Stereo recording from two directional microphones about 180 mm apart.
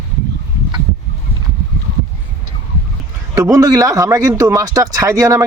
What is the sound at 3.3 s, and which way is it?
A man's voice, 20° right (ahead or behind).